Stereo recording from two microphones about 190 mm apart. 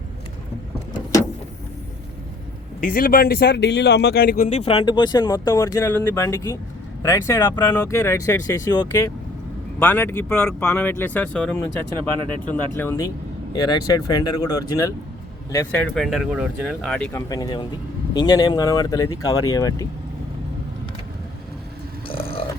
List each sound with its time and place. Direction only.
2.8 s speech: 50° left (ahead or behind)
4.4 s speech: 35° left (ahead or behind); by 11.6 s 5° left (ahead or behind)
12.7 s speech: 15° left (ahead or behind)
15.5 s speech: 10° left (ahead or behind)
17.1 s speech: 15° left (ahead or behind)
22.0 s a sound: 30° left (ahead or behind)